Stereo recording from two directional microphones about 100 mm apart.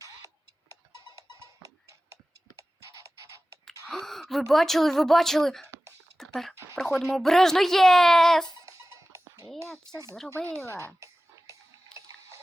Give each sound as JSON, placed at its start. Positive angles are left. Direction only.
{"t": 0.9, "sound": "goat", "side_deg": -30}
{"t": 2.6, "sound": "scratch", "side_deg": -30}
{"t": 3.7, "sound": "speech", "side_deg": 5}
{"t": 6.1, "sound": "a sound", "side_deg": 5}
{"t": 7.0, "sound": "a woman's voice", "side_deg": 5}
{"t": 8.4, "sound": "music", "side_deg": -35}
{"t": 10.2, "sound": "speech", "side_deg": -30}
{"t": 10.7, "sound": "music", "side_deg": -30}